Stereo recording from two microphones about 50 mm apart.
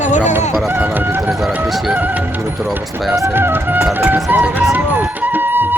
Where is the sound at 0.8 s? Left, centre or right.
Right.